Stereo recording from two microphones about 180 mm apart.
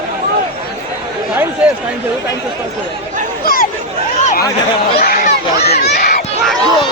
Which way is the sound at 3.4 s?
55° left (ahead or behind).